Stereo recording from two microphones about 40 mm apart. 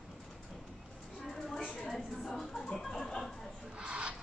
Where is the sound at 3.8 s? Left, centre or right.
Right.